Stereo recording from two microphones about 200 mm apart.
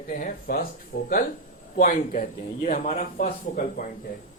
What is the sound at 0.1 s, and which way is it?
Speech, 45° left (ahead or behind).